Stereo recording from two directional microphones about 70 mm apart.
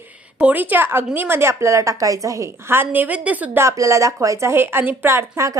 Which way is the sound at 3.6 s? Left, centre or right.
Right.